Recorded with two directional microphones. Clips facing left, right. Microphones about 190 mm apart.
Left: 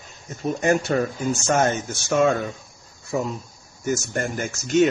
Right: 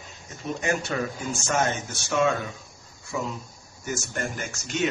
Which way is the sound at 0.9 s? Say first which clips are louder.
Left 6 dB; 45° left (ahead or behind).